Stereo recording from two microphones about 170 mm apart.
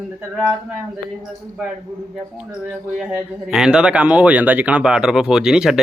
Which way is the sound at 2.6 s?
5° right (ahead or behind).